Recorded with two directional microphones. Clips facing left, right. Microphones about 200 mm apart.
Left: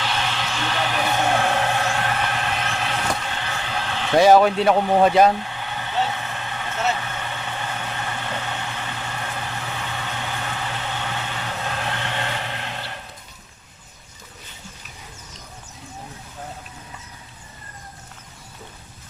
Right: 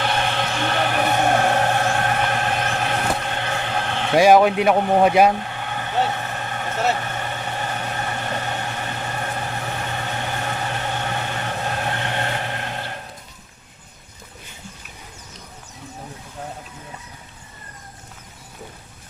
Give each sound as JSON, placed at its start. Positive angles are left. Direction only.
{"t": 0.0, "sound": "vehicle", "side_deg": -55}
{"t": 4.1, "sound": "speech", "side_deg": -10}
{"t": 5.4, "sound": "vehicle", "side_deg": -50}